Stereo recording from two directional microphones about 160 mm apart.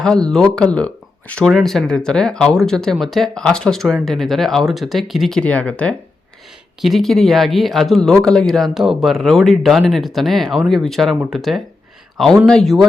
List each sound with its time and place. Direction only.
0.0 s speech: 5° left (ahead or behind)